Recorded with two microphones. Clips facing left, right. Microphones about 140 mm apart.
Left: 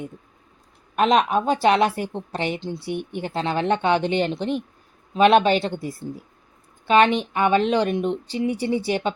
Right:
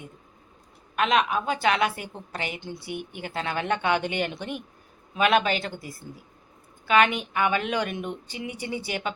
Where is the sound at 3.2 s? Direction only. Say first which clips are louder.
Left 5 dB; 30° left (ahead or behind).